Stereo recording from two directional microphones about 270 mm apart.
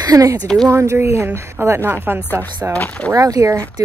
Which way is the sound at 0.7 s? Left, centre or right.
Centre.